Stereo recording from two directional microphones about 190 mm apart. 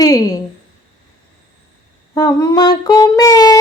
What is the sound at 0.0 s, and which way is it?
Speech, 20° left (ahead or behind).